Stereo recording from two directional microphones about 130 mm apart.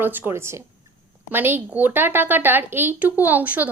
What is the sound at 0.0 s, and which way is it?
A woman's voice, 15° right (ahead or behind).